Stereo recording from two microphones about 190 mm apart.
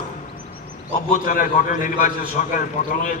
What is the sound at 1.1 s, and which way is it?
A man's voice, 45° left (ahead or behind).